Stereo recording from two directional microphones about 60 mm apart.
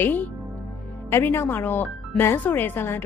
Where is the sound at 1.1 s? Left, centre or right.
Left.